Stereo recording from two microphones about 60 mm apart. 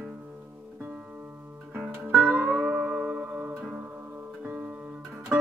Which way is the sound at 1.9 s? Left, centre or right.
Right.